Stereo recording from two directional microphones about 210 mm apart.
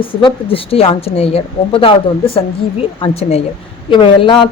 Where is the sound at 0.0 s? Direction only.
25° left (ahead or behind).